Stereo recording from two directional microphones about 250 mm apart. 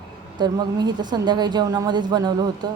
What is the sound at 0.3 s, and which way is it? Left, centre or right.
Speech, centre.